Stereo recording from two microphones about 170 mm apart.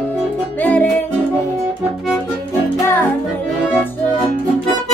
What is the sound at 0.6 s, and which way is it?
Music, 10° left (ahead or behind).